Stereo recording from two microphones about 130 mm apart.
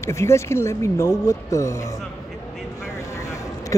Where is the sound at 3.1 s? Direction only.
25° left (ahead or behind).